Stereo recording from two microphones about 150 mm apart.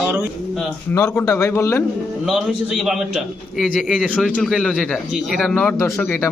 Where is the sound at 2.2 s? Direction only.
Centre (ahead or behind).